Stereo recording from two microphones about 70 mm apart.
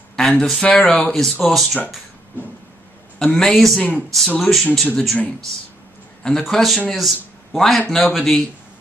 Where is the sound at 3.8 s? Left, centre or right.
Left.